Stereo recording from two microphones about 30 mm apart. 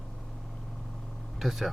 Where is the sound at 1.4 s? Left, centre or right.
Centre.